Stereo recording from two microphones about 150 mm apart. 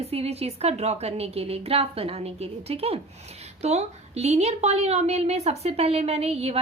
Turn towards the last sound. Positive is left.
turn(degrees=-40)  # may be behind; listen again after turning